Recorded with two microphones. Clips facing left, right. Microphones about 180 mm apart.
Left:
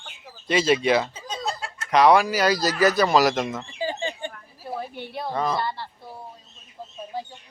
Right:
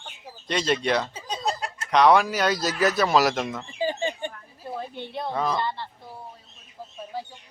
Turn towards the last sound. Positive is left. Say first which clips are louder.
# left 1 dB
turn(degrees=10)  # may be behind; listen again after turning